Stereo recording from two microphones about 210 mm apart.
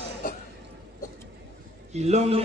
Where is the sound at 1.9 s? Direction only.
30° right (ahead or behind).